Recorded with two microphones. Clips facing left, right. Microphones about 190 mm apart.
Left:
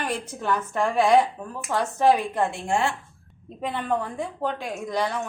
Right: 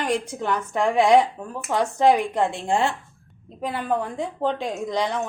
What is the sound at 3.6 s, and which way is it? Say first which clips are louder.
A woman's voice: right 1 dB; centre (ahead or behind).